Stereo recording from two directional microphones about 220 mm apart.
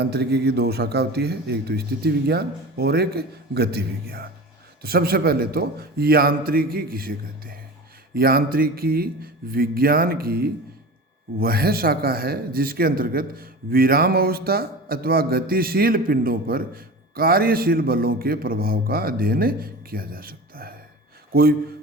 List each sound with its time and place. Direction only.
0.0 s speech: 45° right (ahead or behind)